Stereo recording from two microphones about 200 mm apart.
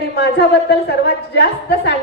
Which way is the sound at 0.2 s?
55° left (ahead or behind).